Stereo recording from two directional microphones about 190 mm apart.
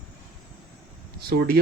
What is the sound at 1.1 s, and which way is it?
Speech, 55° right (ahead or behind).